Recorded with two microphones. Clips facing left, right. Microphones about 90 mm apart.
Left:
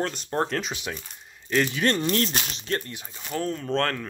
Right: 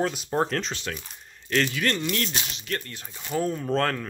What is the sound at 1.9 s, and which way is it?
Speech, 35° left (ahead or behind).